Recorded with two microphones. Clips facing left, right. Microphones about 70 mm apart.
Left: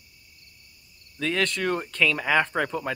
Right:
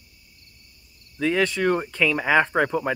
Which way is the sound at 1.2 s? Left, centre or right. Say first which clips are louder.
Right 4 dB; centre.